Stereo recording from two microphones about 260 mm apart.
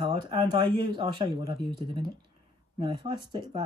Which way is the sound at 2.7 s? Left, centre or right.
Centre.